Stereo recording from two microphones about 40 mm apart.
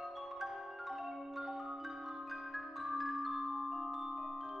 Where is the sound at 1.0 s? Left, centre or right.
Centre.